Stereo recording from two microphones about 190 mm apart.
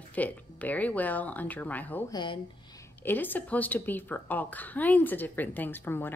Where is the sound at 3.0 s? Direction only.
10° left (ahead or behind).